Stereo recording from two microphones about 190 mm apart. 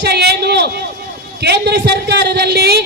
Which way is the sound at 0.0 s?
60° right (ahead or behind).